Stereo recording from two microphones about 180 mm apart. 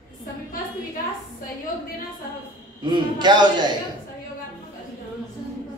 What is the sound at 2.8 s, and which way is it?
Speech, 25° right (ahead or behind).